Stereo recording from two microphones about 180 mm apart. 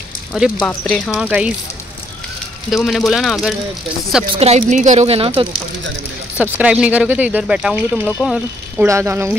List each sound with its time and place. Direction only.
0.6 s speech: 5° left (ahead or behind)
1.1 s speech: 5° right (ahead or behind)
2.7 s speech: centre (ahead or behind)
4.3 s a woman's voice: 35° right (ahead or behind)
6.3 s speech: 5° right (ahead or behind)
8.8 s speech: 15° right (ahead or behind)